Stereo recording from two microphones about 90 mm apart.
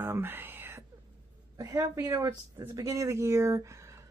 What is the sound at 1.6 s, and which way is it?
Speech, 40° right (ahead or behind).